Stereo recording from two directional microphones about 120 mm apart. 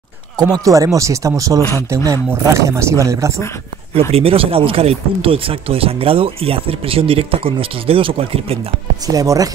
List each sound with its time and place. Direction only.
0.4 s speech: 30° right (ahead or behind)
1.6 s speech: 20° left (ahead or behind)
2.3 s speech: 25° right (ahead or behind)
4.1 s speech: 50° right (ahead or behind)
9.0 s speech: 30° right (ahead or behind)